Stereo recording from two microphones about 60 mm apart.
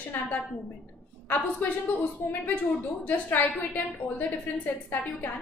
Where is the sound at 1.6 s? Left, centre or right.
Left.